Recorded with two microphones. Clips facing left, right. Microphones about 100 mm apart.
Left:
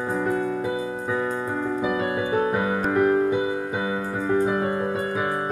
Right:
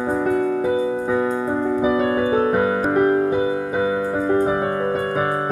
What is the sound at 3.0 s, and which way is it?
Music, 30° right (ahead or behind).